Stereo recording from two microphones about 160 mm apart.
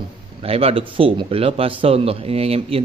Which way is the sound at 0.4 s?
40° right (ahead or behind).